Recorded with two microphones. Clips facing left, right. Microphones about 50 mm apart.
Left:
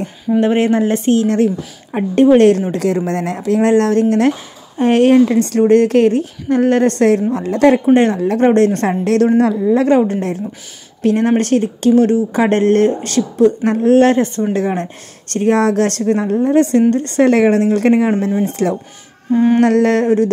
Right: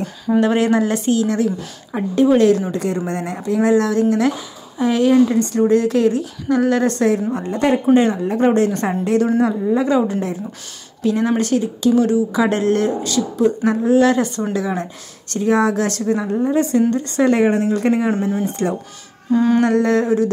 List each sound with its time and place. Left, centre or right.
0.4 s a woman's voice: left
2.7 s a woman's voice: left
5.7 s speech: left
7.3 s speech: left
7.9 s a woman's voice: left
9.0 s a woman's voice: left
14.1 s a woman's voice: left
18.4 s speech: left
19.3 s a sound: left
19.6 s a woman's voice: left